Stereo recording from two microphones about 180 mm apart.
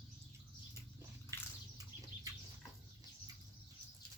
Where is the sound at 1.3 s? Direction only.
15° right (ahead or behind).